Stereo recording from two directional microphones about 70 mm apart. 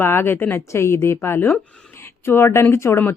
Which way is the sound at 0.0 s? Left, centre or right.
Left.